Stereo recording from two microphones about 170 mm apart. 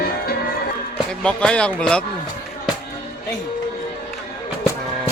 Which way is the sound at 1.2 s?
5° left (ahead or behind).